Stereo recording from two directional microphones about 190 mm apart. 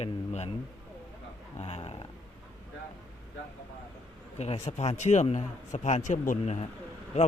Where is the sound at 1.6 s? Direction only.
35° left (ahead or behind).